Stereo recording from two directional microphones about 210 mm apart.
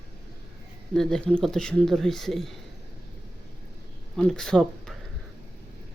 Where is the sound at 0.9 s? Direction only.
Centre (ahead or behind).